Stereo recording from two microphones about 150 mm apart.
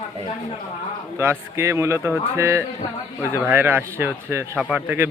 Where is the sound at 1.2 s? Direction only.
15° right (ahead or behind).